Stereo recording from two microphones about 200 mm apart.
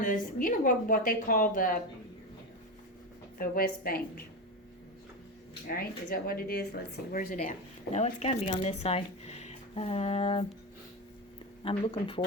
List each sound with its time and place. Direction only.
0.0 s a woman's voice: 40° left (ahead or behind)
3.3 s a woman's voice: 45° left (ahead or behind)
5.6 s a woman's voice: 50° left (ahead or behind); by 10.4 s 30° left (ahead or behind)
11.6 s speech: 25° left (ahead or behind)